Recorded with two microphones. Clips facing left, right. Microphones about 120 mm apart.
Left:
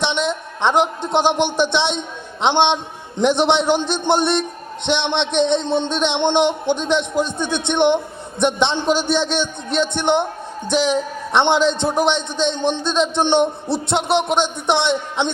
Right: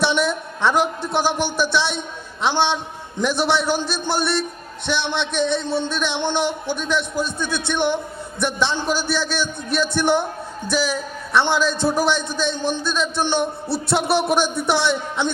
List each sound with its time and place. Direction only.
0.0 s a woman's voice: 20° left (ahead or behind)